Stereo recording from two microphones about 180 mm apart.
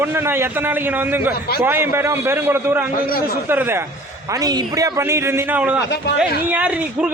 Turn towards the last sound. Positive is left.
turn(degrees=-5)  # may be behind; listen again after turning